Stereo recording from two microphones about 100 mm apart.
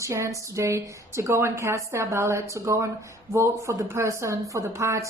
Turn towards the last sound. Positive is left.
turn(degrees=-30)  # may be behind; listen again after turning